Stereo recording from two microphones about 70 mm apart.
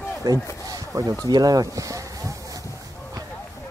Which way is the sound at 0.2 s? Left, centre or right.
Right.